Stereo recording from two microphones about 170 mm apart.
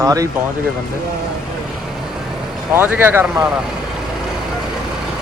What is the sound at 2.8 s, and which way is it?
Speech, 10° right (ahead or behind).